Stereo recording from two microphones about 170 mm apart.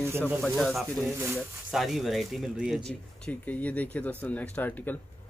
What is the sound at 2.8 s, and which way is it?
Speech, 5° left (ahead or behind).